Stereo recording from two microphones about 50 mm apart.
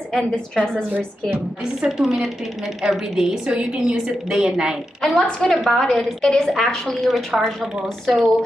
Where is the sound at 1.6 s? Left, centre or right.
Centre.